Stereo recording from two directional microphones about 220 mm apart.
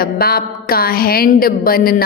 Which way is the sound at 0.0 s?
45° left (ahead or behind).